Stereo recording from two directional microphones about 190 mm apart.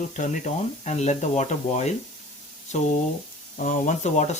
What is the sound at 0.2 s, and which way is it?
Speech, 40° left (ahead or behind).